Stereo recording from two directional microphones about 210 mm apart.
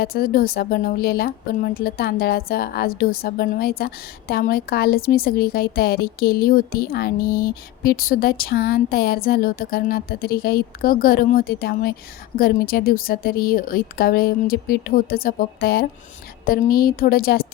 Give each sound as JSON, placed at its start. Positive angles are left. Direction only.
{"t": 0.0, "sound": "a woman's voice", "side_deg": 45}